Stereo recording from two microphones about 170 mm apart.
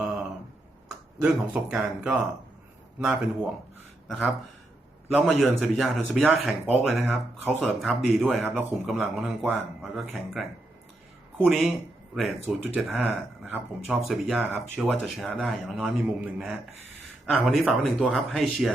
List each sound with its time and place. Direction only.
0.0 s a sound: 5° right (ahead or behind)
0.9 s speech: 5° right (ahead or behind)
5.1 s speech: centre (ahead or behind)
11.4 s speech: 5° right (ahead or behind)